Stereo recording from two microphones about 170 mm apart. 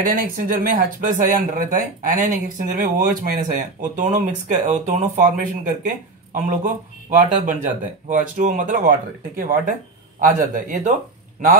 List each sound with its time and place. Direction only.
0.0 s speech: 55° right (ahead or behind)